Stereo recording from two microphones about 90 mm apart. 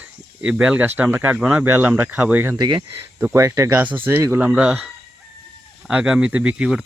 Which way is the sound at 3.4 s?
30° right (ahead or behind).